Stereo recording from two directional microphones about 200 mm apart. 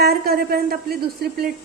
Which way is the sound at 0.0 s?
50° right (ahead or behind).